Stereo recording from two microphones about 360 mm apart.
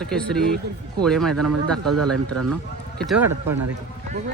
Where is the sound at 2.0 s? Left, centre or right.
Right.